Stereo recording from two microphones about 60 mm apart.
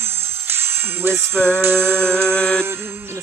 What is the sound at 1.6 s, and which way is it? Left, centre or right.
Speech, right.